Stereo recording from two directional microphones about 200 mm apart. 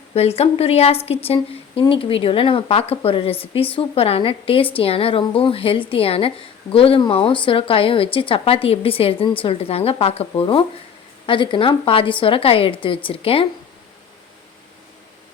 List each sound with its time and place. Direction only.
0.1 s speech: 30° left (ahead or behind)